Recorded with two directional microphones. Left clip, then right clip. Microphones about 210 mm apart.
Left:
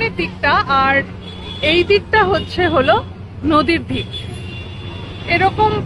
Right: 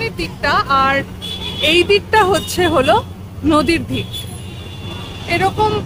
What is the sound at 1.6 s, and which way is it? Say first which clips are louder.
A woman's voice: right 1 dB; 40° right (ahead or behind).